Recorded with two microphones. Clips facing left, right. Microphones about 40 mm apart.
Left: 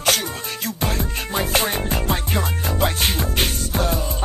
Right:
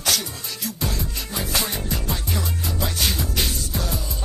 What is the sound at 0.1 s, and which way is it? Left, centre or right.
Music, left.